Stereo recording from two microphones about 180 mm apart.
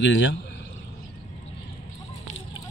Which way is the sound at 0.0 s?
90° left.